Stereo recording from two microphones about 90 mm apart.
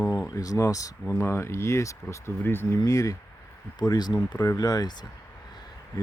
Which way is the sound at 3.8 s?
50° left (ahead or behind).